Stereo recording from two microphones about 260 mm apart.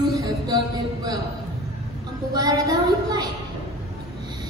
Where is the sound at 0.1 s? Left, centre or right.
Centre.